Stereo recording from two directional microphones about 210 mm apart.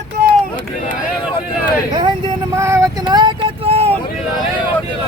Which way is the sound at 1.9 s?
20° right (ahead or behind).